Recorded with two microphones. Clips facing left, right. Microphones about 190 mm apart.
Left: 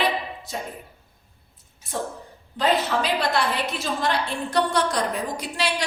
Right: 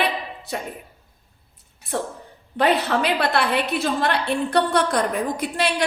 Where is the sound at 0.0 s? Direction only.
65° right (ahead or behind).